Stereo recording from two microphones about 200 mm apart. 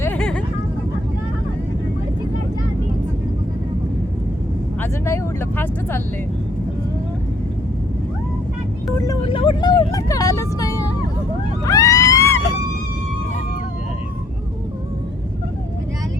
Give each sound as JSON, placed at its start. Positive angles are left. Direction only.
{"t": 0.0, "sound": "vehicle", "side_deg": 5}
{"t": 4.8, "sound": "vehicle", "side_deg": 10}
{"t": 9.0, "sound": "vehicle", "side_deg": 20}
{"t": 11.6, "sound": "screaming", "side_deg": 15}